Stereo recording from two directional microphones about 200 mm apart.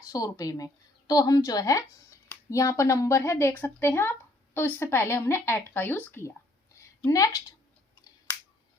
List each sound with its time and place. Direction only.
0.0 s a woman's voice: 15° left (ahead or behind)